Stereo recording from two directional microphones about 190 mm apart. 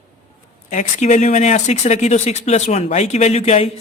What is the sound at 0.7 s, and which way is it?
Speech, 40° left (ahead or behind).